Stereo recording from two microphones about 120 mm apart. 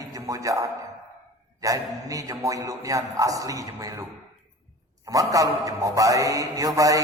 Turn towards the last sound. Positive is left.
turn(degrees=-30)  # may be behind; listen again after turning